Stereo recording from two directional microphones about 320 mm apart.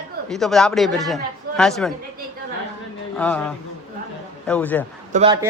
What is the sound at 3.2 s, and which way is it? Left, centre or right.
A man's voice, centre.